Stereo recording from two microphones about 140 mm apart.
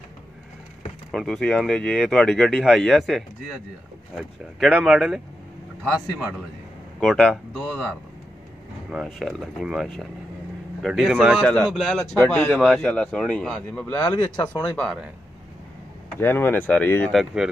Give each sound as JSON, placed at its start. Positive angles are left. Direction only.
{"t": 1.1, "sound": "speech", "side_deg": 5}
{"t": 7.0, "sound": "speech", "side_deg": 0}
{"t": 8.9, "sound": "speech", "side_deg": 0}
{"t": 11.4, "sound": "a man's voice", "side_deg": 5}
{"t": 14.0, "sound": "speech", "side_deg": 30}
{"t": 14.6, "sound": "speech", "side_deg": 5}
{"t": 16.2, "sound": "a man's voice", "side_deg": 15}
{"t": 17.1, "sound": "speech", "side_deg": 0}